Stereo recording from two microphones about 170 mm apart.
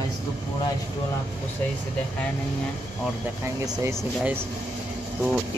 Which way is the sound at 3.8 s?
15° right (ahead or behind).